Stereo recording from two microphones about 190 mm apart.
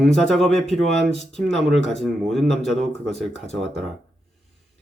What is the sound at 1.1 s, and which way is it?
Speech, 35° left (ahead or behind).